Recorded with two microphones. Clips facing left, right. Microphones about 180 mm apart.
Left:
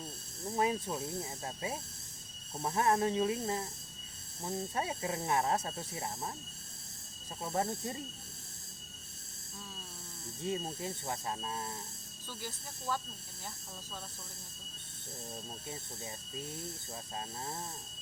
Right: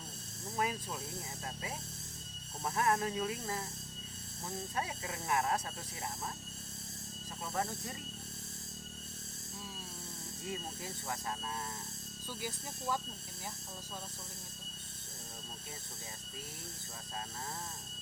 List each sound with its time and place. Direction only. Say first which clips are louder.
0.5 s speech: left 5 dB; 25° left (ahead or behind)
7.4 s speech: left 4 dB; 25° left (ahead or behind)
10.4 s speech: left 6 dB; 25° left (ahead or behind)
12.3 s speech: right 2 dB; 15° right (ahead or behind)